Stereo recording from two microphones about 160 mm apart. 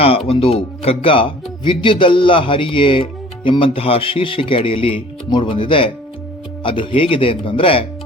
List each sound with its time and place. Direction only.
0.3 s speech: 35° left (ahead or behind)